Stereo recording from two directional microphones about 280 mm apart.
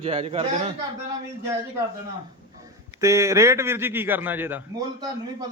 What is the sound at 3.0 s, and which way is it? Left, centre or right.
Speech, centre.